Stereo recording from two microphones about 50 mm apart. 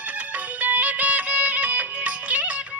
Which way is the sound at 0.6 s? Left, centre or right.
Right.